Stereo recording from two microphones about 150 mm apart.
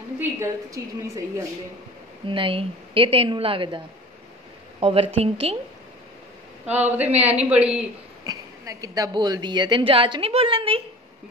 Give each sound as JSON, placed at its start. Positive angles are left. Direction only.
{"t": 0.2, "sound": "a woman's voice", "side_deg": -20}
{"t": 2.2, "sound": "a woman's voice", "side_deg": -35}
{"t": 6.6, "sound": "speech", "side_deg": -10}
{"t": 8.2, "sound": "a woman's voice", "side_deg": -25}